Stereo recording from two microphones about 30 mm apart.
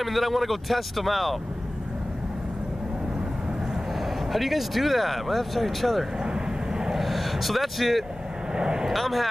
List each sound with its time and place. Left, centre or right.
0.0 s speech: centre
4.3 s speech: centre
6.2 s vehicle: right
7.0 s speech: centre
8.5 s speech: right
8.9 s speech: centre